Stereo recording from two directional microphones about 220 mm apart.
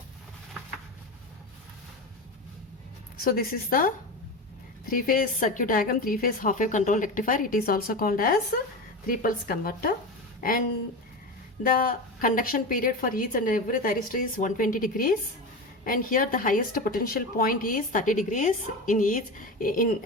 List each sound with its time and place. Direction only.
3.2 s speech: 40° left (ahead or behind)
11.6 s speech: 40° left (ahead or behind)